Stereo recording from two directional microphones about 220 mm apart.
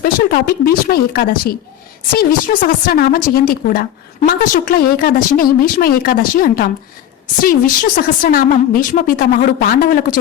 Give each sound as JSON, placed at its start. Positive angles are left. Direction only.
{"t": 0.0, "sound": "speech", "side_deg": 45}